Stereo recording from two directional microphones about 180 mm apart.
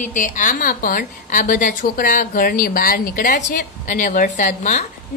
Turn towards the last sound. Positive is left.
turn(degrees=40)  # may be behind; listen again after turning